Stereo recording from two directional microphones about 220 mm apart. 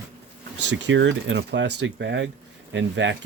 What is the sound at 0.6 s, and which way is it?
Speech, 55° right (ahead or behind).